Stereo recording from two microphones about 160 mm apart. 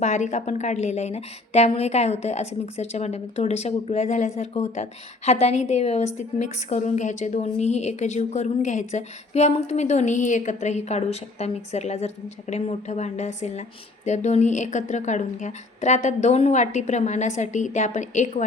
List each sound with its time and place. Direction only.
0.0 s a woman's voice: 45° left (ahead or behind)